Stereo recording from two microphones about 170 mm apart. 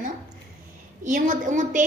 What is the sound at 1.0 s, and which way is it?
Speech, 50° right (ahead or behind).